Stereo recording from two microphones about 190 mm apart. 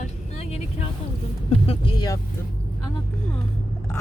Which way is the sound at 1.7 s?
25° left (ahead or behind).